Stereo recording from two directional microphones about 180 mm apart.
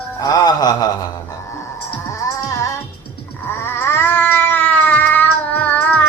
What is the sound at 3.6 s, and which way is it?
Cat, 10° left (ahead or behind).